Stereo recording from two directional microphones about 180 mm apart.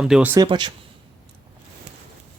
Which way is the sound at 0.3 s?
25° right (ahead or behind).